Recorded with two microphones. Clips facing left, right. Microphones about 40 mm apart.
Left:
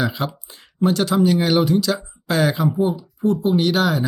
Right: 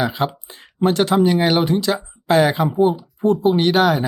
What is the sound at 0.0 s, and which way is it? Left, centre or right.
Speech, right.